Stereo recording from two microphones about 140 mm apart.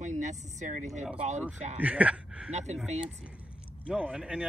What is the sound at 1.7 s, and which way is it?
Speech, 10° right (ahead or behind).